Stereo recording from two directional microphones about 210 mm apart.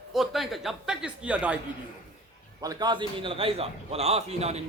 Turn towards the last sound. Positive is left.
turn(degrees=-30)  # may be behind; listen again after turning